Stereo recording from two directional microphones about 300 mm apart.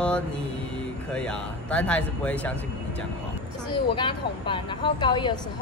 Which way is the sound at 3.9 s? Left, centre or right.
Centre.